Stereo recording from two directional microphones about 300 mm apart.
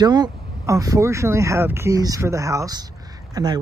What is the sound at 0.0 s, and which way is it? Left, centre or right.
Speech, centre.